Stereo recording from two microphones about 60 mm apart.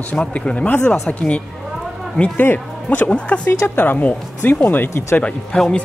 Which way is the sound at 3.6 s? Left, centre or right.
Left.